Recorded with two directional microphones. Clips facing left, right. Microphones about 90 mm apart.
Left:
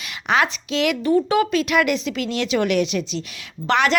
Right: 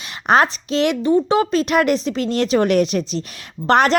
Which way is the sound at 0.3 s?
40° right (ahead or behind).